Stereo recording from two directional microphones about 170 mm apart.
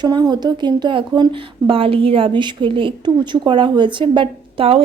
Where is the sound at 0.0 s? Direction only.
25° right (ahead or behind).